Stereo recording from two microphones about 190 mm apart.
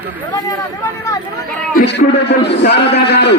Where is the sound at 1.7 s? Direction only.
65° left (ahead or behind).